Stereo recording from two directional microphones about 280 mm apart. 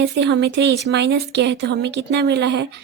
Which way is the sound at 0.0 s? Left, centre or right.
Right.